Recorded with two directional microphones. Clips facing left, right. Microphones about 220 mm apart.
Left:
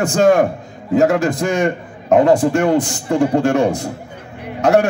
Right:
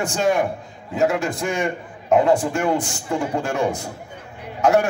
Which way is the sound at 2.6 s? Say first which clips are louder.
Left 6 dB; 75° left (ahead or behind).